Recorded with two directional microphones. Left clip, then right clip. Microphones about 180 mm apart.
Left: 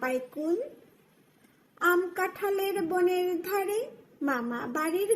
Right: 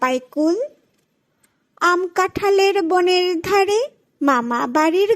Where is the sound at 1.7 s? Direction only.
40° right (ahead or behind).